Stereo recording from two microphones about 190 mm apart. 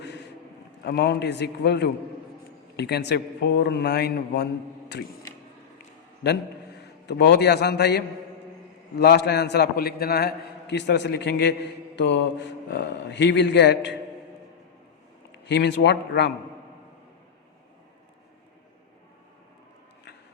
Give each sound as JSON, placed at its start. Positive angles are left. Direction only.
{"t": 0.9, "sound": "a man's voice", "side_deg": 60}
{"t": 6.7, "sound": "a man's voice", "side_deg": 60}
{"t": 15.4, "sound": "a man's voice", "side_deg": 65}